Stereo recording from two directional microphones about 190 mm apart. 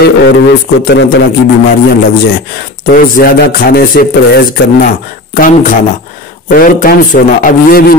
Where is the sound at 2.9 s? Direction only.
50° left (ahead or behind).